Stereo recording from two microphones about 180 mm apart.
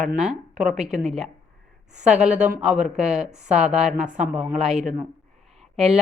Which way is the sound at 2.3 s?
40° right (ahead or behind).